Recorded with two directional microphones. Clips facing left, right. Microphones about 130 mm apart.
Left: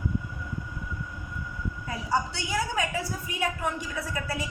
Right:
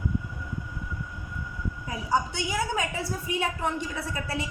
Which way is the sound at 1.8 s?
15° right (ahead or behind).